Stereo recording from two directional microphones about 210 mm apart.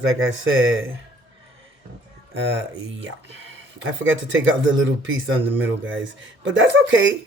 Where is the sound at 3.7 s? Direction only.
65° right (ahead or behind).